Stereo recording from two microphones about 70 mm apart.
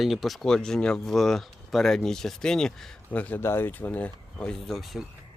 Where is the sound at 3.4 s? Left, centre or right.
Left.